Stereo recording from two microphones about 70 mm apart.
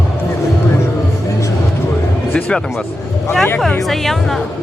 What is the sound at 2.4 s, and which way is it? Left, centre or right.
Speech, centre.